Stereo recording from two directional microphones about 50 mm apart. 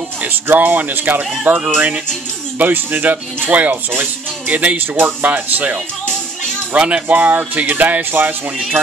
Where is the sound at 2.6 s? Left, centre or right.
Right.